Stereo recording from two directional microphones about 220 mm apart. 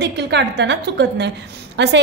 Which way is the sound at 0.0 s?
50° right (ahead or behind).